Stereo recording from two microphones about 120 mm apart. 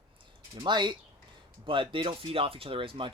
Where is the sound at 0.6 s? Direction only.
40° right (ahead or behind).